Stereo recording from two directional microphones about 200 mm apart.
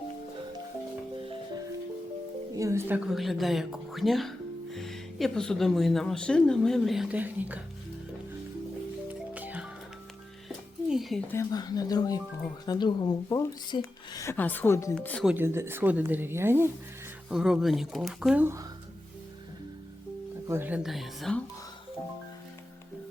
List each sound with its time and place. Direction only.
2.6 s a woman's voice: 15° right (ahead or behind)
9.3 s music: 10° right (ahead or behind)
10.8 s a sound: centre (ahead or behind)
11.3 s a woman's voice: 15° left (ahead or behind)
15.3 s a woman's voice: 10° right (ahead or behind)
20.5 s a woman's voice: 10° right (ahead or behind)